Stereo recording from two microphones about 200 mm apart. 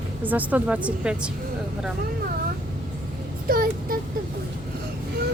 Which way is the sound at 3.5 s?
45° right (ahead or behind).